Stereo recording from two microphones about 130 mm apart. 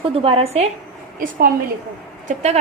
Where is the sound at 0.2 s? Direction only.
45° right (ahead or behind).